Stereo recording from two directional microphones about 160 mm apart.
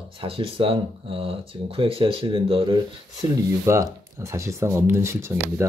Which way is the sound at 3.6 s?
20° right (ahead or behind).